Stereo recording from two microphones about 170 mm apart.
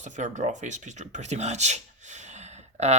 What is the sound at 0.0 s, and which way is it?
Speech, 45° right (ahead or behind).